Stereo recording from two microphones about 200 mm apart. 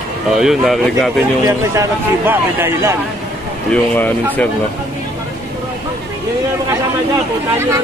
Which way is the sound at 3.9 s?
10° left (ahead or behind).